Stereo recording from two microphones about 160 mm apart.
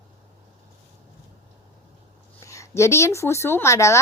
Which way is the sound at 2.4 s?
20° left (ahead or behind).